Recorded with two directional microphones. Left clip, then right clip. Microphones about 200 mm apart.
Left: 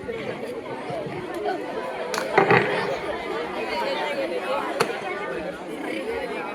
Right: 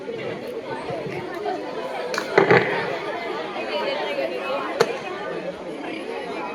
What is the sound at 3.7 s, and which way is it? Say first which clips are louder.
Chatter: right 1 dB; 50° left (ahead or behind).